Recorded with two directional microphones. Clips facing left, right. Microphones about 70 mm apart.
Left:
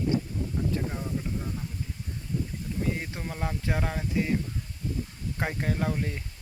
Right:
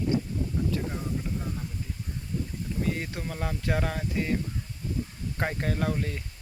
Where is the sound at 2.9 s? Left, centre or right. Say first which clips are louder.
Right 1 dB; centre.